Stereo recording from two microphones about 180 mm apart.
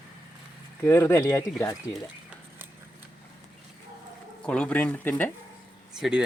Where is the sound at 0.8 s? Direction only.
10° left (ahead or behind).